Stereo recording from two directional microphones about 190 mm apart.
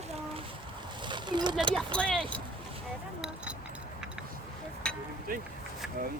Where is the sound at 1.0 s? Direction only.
25° right (ahead or behind).